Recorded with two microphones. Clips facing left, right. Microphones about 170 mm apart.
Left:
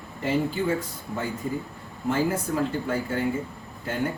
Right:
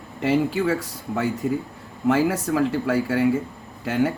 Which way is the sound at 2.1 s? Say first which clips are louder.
Right 5 dB; 85° right.